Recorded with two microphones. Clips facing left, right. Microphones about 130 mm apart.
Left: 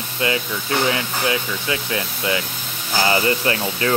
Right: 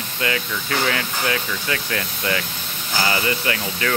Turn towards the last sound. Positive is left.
turn(degrees=30)  # may be behind; listen again after turning